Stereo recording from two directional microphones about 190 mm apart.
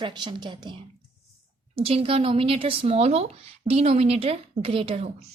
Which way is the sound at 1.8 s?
30° right (ahead or behind).